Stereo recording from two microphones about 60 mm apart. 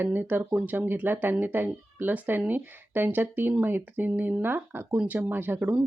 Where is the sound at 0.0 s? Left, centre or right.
Right.